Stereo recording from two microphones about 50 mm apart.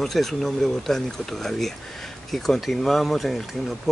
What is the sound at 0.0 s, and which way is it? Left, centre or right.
Speech, centre.